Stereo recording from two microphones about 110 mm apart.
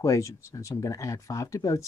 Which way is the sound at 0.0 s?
30° left (ahead or behind).